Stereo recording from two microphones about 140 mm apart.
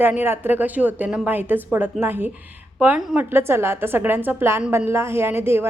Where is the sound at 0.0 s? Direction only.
15° right (ahead or behind).